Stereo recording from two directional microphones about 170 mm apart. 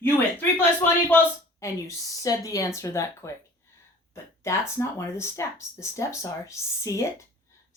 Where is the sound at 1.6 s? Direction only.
15° left (ahead or behind).